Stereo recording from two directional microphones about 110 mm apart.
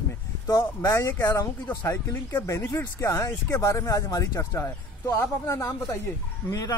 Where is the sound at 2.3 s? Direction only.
25° left (ahead or behind).